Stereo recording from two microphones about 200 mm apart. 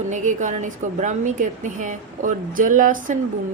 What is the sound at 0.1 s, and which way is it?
A woman's voice, 40° right (ahead or behind).